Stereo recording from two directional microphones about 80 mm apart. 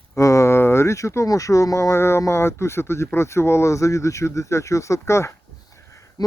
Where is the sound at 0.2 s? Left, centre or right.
Left.